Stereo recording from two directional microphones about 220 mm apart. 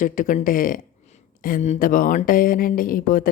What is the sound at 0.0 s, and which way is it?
Speech, 35° left (ahead or behind).